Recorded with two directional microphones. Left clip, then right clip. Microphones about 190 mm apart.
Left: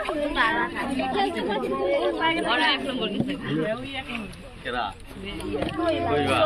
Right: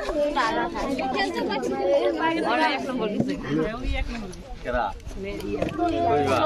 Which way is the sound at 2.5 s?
55° right (ahead or behind).